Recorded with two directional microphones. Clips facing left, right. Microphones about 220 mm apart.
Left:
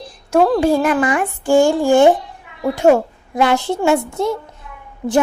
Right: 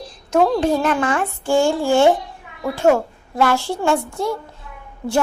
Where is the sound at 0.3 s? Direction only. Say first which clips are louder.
Left 3 dB; 5° left (ahead or behind).